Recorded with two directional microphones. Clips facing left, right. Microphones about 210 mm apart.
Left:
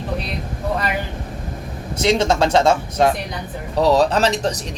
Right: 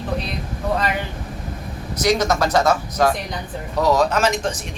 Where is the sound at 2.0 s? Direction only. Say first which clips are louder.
Left 2 dB; 25° left (ahead or behind).